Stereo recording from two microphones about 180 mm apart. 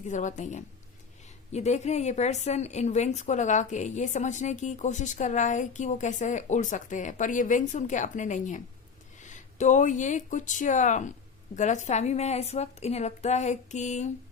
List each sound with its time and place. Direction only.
0.1 s a woman's voice: 45° left (ahead or behind)